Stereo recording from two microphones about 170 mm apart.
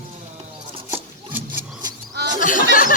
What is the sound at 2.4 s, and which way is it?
Speech, 50° left (ahead or behind).